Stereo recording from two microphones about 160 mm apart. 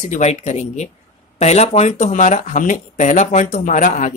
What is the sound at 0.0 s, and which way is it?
A woman's voice, 45° left (ahead or behind).